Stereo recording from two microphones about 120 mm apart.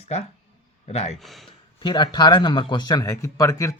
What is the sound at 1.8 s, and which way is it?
Speech, 40° left (ahead or behind).